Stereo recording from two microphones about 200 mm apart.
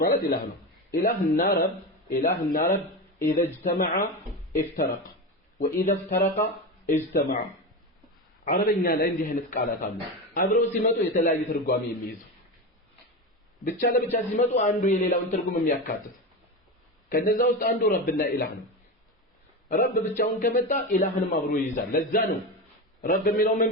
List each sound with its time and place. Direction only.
0.0 s speech: 45° left (ahead or behind)
5.5 s speech: 45° left (ahead or behind)
8.4 s speech: 45° left (ahead or behind)
13.7 s a man's voice: 40° left (ahead or behind)
17.1 s speech: 45° left (ahead or behind)
19.6 s speech: 45° left (ahead or behind)